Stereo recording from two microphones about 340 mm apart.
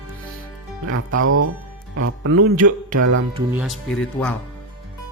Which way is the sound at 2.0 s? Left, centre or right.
Right.